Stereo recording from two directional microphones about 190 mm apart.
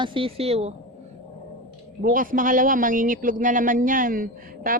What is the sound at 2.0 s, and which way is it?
A woman's voice, 45° right (ahead or behind).